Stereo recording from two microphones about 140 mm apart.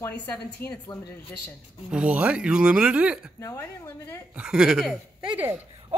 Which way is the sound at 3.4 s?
20° left (ahead or behind).